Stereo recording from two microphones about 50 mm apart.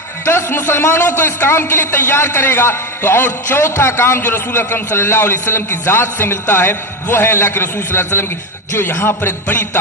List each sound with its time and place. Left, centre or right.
0.3 s a man's voice: left
8.8 s a man's voice: left